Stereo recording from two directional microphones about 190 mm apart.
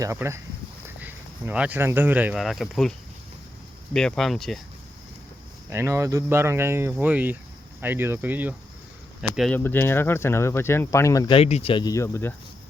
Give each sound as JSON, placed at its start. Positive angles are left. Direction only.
{"t": 0.0, "sound": "cricket", "side_deg": -15}
{"t": 1.0, "sound": "speech", "side_deg": -10}
{"t": 3.9, "sound": "speech", "side_deg": 5}
{"t": 5.7, "sound": "cricket", "side_deg": -15}
{"t": 9.3, "sound": "speech", "side_deg": 0}
{"t": 9.6, "sound": "speech", "side_deg": 10}
{"t": 11.3, "sound": "speech", "side_deg": 35}